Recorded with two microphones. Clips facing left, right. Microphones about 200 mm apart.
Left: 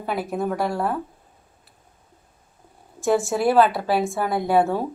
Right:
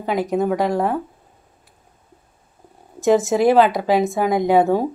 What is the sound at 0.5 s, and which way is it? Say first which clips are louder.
Speech: right 5 dB; 15° right (ahead or behind).